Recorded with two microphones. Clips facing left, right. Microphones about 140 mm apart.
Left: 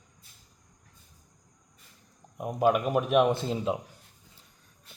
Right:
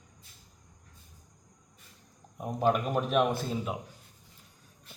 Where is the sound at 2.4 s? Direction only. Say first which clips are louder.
Left 3 dB; 10° left (ahead or behind).